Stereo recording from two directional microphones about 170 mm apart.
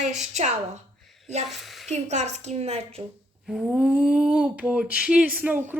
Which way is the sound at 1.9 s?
40° right (ahead or behind).